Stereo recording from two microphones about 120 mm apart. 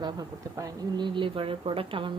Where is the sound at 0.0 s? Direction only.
30° right (ahead or behind).